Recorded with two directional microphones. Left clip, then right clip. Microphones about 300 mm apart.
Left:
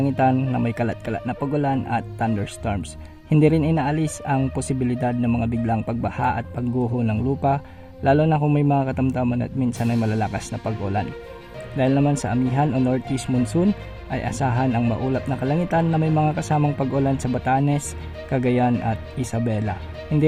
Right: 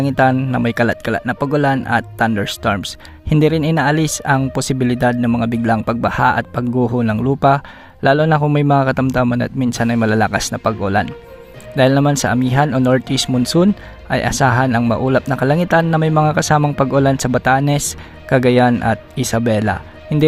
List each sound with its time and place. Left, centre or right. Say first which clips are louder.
0.0 s speech: right 6 dB; right